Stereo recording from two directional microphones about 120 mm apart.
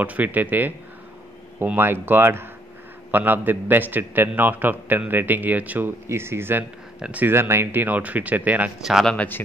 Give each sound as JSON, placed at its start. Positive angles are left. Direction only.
{"t": 0.0, "sound": "a man's voice", "side_deg": -15}
{"t": 8.8, "sound": "speech", "side_deg": -5}
{"t": 9.1, "sound": "speech", "side_deg": 10}